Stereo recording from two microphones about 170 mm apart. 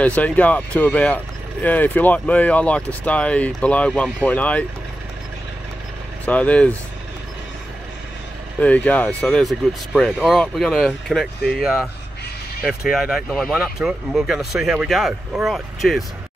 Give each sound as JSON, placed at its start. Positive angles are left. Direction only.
{"t": 0.0, "sound": "speech", "side_deg": 10}
{"t": 6.2, "sound": "speech", "side_deg": 10}
{"t": 8.5, "sound": "speech", "side_deg": 10}